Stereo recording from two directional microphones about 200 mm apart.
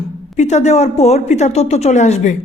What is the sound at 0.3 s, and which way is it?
Speech, 35° left (ahead or behind).